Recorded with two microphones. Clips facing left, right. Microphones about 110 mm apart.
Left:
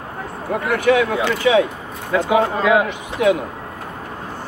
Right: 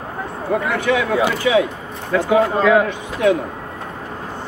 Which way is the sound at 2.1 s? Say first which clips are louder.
Right 1 dB; 20° left (ahead or behind).